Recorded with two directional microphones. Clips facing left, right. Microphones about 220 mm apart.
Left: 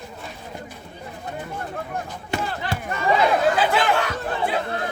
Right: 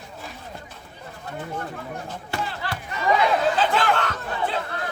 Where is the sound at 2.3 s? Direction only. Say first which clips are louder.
Left 3 dB; 20° left (ahead or behind).